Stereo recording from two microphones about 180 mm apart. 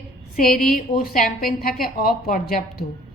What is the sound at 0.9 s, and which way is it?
A woman's voice, 55° left (ahead or behind).